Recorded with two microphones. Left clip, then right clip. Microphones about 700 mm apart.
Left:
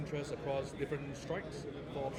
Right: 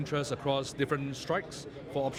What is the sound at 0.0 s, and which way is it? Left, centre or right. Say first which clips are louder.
A man's voice: right 8 dB; right.